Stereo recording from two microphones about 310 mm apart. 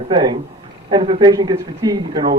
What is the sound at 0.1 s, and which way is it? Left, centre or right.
Speech, centre.